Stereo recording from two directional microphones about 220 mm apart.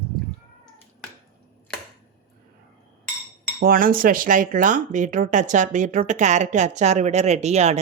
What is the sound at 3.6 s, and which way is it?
Speech, 40° right (ahead or behind).